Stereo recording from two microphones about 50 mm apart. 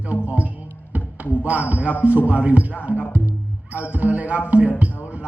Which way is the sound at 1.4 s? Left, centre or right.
Right.